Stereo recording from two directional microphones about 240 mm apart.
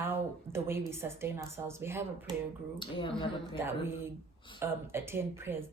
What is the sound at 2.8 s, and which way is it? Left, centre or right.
Speech, left.